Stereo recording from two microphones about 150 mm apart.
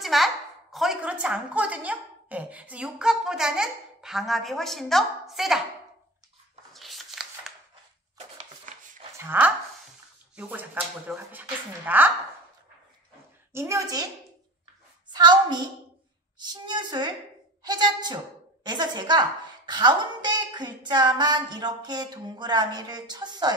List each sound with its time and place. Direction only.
0.0 s a woman's voice: centre (ahead or behind)
6.7 s a sound: centre (ahead or behind)
9.2 s speech: 10° right (ahead or behind)
13.5 s a woman's voice: 20° right (ahead or behind)
15.1 s a woman's voice: 30° right (ahead or behind)